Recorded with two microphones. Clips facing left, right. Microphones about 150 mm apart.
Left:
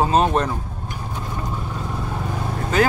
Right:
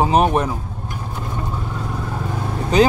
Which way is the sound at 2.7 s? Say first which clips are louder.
Right 4 dB; 20° right (ahead or behind).